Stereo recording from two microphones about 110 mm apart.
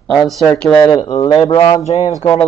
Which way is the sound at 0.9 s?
60° left (ahead or behind).